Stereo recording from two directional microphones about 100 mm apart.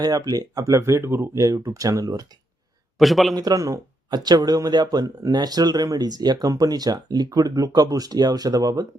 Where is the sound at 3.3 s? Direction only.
40° right (ahead or behind).